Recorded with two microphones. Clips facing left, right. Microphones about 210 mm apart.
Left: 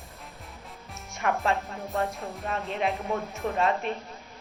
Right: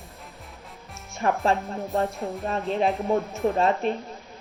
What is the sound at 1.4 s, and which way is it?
Speech, 30° right (ahead or behind).